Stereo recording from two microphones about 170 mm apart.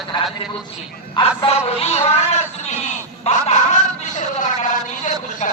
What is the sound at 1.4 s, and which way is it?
Synthetic singing, 40° left (ahead or behind).